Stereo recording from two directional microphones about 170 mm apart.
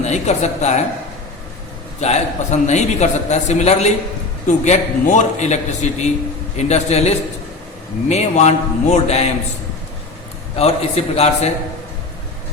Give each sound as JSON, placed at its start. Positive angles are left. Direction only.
{"t": 0.0, "sound": "a man's voice", "side_deg": 40}
{"t": 2.0, "sound": "a man's voice", "side_deg": 40}
{"t": 10.5, "sound": "a man's voice", "side_deg": 35}